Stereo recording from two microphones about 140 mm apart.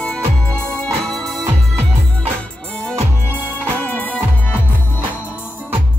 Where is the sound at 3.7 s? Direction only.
10° left (ahead or behind).